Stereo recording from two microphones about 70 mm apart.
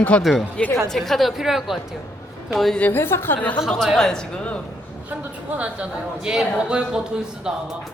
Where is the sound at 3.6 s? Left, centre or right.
Centre.